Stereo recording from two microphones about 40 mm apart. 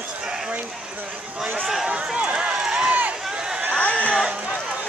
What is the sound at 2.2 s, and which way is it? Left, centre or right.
Speech, right.